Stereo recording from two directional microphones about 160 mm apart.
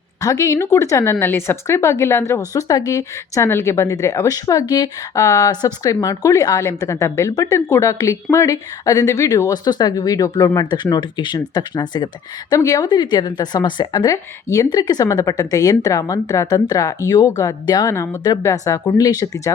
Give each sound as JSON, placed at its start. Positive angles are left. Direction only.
{"t": 0.2, "sound": "speech", "side_deg": 20}